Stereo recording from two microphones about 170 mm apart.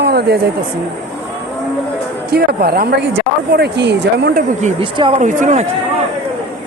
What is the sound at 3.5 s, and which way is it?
Speech, 75° right (ahead or behind).